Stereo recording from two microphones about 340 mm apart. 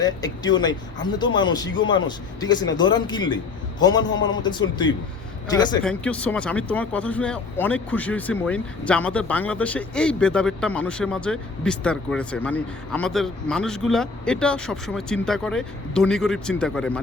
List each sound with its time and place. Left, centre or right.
0.0 s speech: centre